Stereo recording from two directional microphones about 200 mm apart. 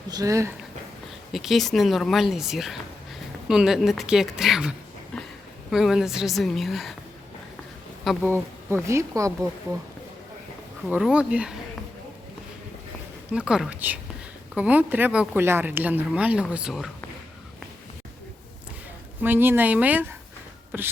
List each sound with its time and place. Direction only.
0.1 s speech: 15° right (ahead or behind)
1.3 s speech: centre (ahead or behind)
5.1 s a sound: centre (ahead or behind)
5.7 s speech: centre (ahead or behind)
8.0 s speech: centre (ahead or behind)
8.3 s speech: 15° right (ahead or behind)
10.8 s speech: 5° right (ahead or behind)
13.3 s speech: 5° right (ahead or behind)
19.2 s speech: 10° right (ahead or behind)